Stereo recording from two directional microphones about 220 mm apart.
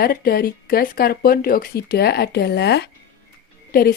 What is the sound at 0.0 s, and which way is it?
A woman's voice, 40° left (ahead or behind).